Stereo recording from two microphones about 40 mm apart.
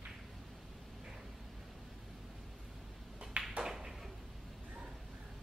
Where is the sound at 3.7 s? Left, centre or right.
Centre.